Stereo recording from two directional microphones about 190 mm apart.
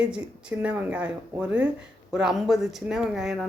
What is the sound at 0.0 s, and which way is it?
Speech, 5° right (ahead or behind).